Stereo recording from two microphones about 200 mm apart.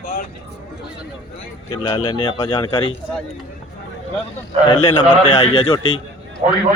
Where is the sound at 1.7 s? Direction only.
20° left (ahead or behind).